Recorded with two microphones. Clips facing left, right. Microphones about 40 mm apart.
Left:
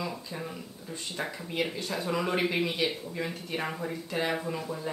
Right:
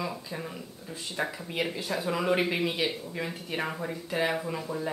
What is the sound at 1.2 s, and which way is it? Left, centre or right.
Speech, centre.